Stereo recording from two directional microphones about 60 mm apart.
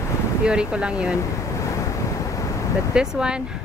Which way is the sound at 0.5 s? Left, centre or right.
Centre.